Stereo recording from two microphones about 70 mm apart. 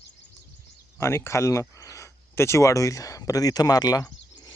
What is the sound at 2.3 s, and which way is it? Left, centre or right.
Speech, left.